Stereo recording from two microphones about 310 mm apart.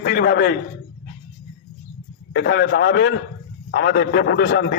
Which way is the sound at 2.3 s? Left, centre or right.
Left.